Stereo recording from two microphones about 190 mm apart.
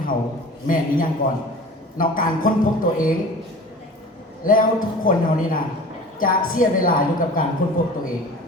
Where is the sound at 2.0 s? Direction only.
45° left (ahead or behind).